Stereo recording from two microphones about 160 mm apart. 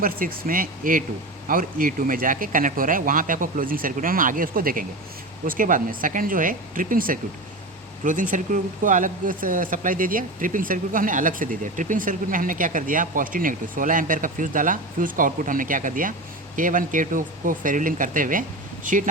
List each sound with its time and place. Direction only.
0.4 s speech: 60° right (ahead or behind)